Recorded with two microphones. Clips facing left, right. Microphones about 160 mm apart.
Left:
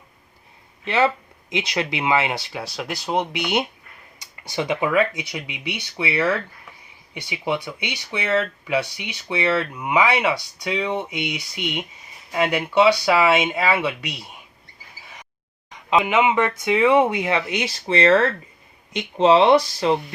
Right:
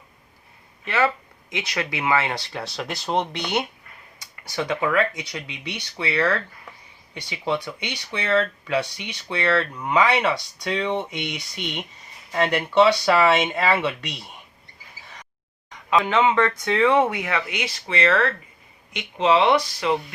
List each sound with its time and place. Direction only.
0.9 s speech: 25° left (ahead or behind); by 14.3 s 5° left (ahead or behind)
15.9 s speech: 15° left (ahead or behind)